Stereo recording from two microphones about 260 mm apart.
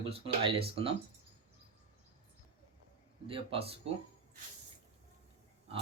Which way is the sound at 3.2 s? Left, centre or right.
Right.